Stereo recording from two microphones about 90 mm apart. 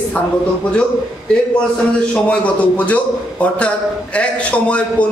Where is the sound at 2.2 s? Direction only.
15° left (ahead or behind).